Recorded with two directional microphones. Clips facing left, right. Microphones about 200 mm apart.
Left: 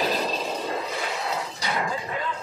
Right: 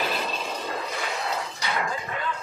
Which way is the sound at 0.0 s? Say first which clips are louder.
Left 3 dB; 35° left (ahead or behind).